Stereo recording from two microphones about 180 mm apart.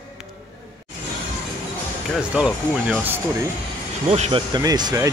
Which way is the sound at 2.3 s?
5° right (ahead or behind).